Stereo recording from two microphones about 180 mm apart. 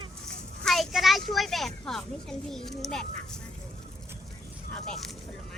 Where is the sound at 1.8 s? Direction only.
5° left (ahead or behind).